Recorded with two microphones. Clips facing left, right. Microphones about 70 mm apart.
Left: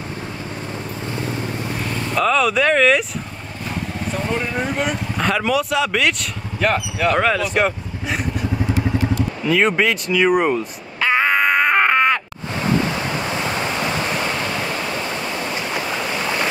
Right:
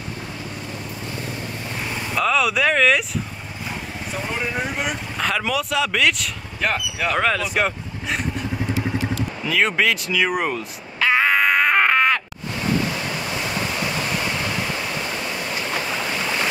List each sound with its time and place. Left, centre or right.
2.1 s speech: centre
4.1 s a sound: centre
9.4 s crow: centre
12.9 s waves: left
15.7 s boat: centre